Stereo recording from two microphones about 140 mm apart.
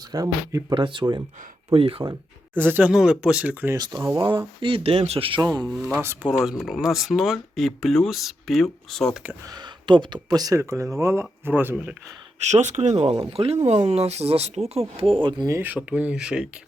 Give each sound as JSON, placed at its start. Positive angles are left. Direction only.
{"t": 0.1, "sound": "speech", "side_deg": -30}
{"t": 2.6, "sound": "speech", "side_deg": -15}
{"t": 3.8, "sound": "speech", "side_deg": -25}
{"t": 4.6, "sound": "speech", "side_deg": -40}
{"t": 5.4, "sound": "speech", "side_deg": -25}
{"t": 5.6, "sound": "speech", "side_deg": -5}
{"t": 9.5, "sound": "speech", "side_deg": -30}
{"t": 12.5, "sound": "speech", "side_deg": -55}
{"t": 15.5, "sound": "speech", "side_deg": -10}